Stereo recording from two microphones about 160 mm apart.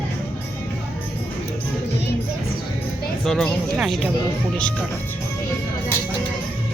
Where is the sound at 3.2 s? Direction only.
Centre (ahead or behind).